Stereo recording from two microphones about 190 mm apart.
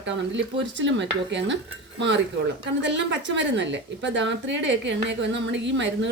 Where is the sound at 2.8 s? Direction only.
70° right (ahead or behind).